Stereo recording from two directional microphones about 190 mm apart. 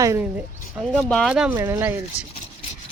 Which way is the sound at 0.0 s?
15° right (ahead or behind).